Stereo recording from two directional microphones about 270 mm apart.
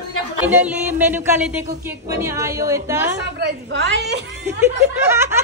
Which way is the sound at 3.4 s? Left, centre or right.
Right.